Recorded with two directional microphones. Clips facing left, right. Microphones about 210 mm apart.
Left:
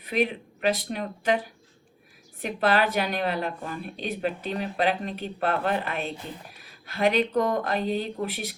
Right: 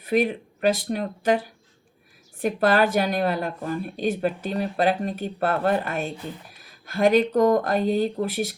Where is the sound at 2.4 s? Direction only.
45° right (ahead or behind).